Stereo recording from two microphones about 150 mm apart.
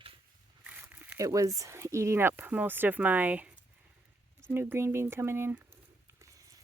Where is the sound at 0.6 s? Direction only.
10° right (ahead or behind).